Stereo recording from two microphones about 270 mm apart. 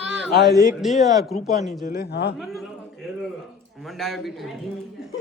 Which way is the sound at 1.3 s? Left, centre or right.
Left.